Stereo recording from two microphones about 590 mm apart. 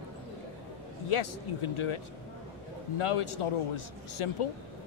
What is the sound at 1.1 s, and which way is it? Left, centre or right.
Speech, left.